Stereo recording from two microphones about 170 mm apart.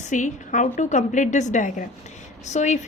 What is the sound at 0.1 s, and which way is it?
A woman's voice, 45° left (ahead or behind).